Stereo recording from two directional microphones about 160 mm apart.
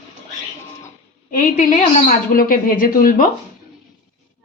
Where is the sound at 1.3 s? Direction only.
55° left (ahead or behind).